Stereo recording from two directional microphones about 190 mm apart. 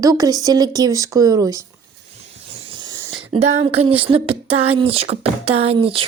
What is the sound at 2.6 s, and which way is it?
Wheeze, 25° right (ahead or behind).